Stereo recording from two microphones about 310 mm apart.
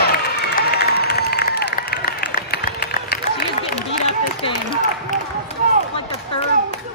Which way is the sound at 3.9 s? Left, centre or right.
Centre.